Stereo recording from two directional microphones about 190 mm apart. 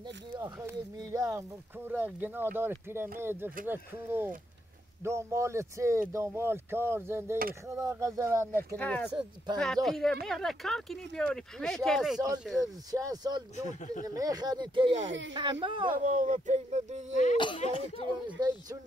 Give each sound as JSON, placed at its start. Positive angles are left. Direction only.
{"t": 0.3, "sound": "speech", "side_deg": -15}
{"t": 8.7, "sound": "speech", "side_deg": 10}
{"t": 12.5, "sound": "speech", "side_deg": -20}
{"t": 13.7, "sound": "speech", "side_deg": 40}
{"t": 14.0, "sound": "speech", "side_deg": -20}
{"t": 15.0, "sound": "speech", "side_deg": -75}
{"t": 15.3, "sound": "speech", "side_deg": -25}
{"t": 16.0, "sound": "speech", "side_deg": -45}
{"t": 17.4, "sound": "speech", "side_deg": 30}
{"t": 18.2, "sound": "speech", "side_deg": -20}